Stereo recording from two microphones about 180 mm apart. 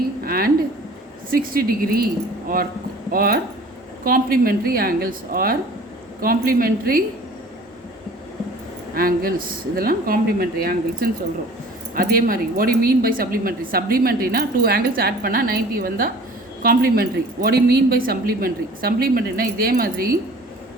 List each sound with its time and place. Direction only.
0.2 s a sound: 55° right (ahead or behind)
1.3 s a woman's voice: 55° right (ahead or behind)
3.1 s a woman's voice: 55° right (ahead or behind)
9.0 s a woman's voice: 55° right (ahead or behind)